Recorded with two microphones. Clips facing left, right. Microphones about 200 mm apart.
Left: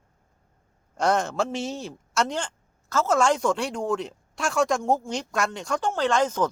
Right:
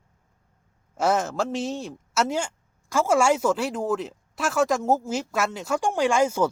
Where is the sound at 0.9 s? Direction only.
5° right (ahead or behind).